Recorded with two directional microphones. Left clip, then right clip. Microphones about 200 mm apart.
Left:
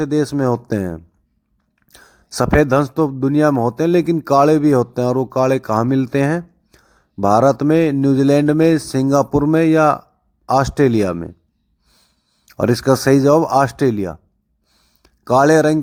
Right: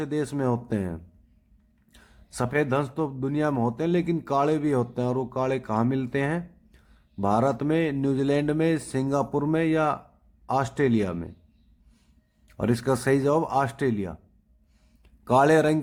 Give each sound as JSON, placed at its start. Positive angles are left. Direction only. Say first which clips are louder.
{"t": 0.0, "sound": "a man's voice", "louder": "left 10 dB", "side_deg": 35}
{"t": 12.5, "sound": "a man's voice", "louder": "left 10 dB", "side_deg": 35}
{"t": 14.7, "sound": "a sound", "louder": "left 11 dB", "side_deg": 25}
{"t": 15.3, "sound": "speech", "louder": "left 7 dB", "side_deg": 30}